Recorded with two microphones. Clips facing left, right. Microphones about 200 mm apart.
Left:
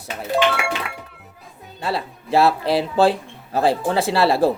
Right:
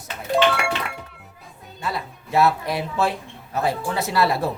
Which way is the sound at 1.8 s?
30° left (ahead or behind).